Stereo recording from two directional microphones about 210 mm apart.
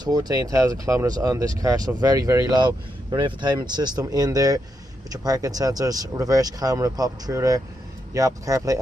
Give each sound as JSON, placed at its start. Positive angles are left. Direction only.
{"t": 0.0, "sound": "speech", "side_deg": -20}